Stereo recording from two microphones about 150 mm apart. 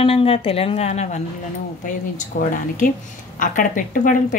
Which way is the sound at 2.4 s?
60° left (ahead or behind).